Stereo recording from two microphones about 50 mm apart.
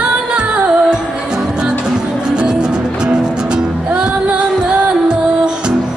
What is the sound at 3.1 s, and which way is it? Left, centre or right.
Music, centre.